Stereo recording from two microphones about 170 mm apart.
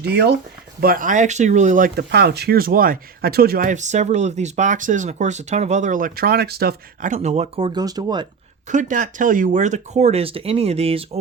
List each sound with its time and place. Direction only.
0.0 s speech: 75° right (ahead or behind)
0.8 s speech: 55° right (ahead or behind)
2.0 s speech: 80° right
7.1 s speech: 40° right (ahead or behind); by 8.3 s 25° right (ahead or behind)
8.7 s speech: 50° right (ahead or behind)